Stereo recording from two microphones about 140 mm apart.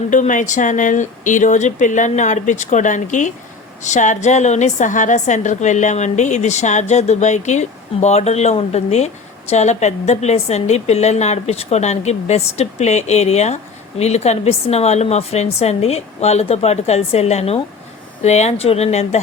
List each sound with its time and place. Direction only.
0.1 s a woman's voice: 65° left (ahead or behind)